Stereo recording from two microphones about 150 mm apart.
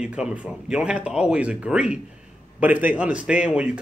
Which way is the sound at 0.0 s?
5° right (ahead or behind).